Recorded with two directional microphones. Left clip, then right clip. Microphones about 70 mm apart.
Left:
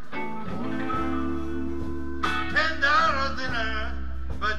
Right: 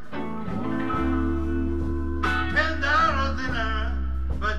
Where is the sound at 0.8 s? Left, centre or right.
Left.